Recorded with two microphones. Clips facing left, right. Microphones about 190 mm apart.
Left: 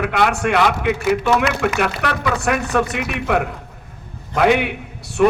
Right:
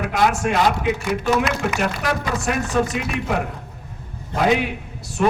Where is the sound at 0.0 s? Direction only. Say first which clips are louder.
Left 1 dB; 65° left (ahead or behind).